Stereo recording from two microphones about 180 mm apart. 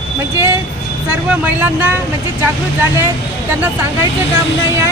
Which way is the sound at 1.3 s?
10° right (ahead or behind).